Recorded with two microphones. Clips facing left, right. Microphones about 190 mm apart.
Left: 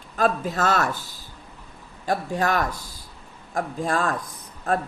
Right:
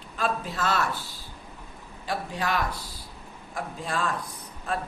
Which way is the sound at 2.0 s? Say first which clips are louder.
Left 6 dB; 45° left (ahead or behind).